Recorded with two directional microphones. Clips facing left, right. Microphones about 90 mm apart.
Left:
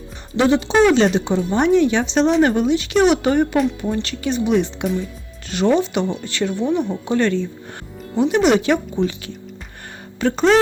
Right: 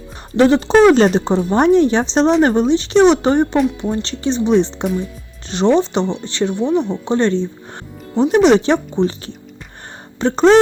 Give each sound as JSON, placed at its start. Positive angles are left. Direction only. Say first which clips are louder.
{"t": 0.3, "sound": "speech", "louder": "right 4 dB", "side_deg": -40}